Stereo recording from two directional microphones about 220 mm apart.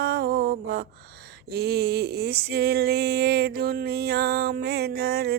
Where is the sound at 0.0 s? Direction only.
45° right (ahead or behind).